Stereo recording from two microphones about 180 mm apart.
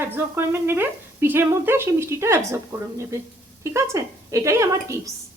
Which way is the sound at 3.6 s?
15° right (ahead or behind).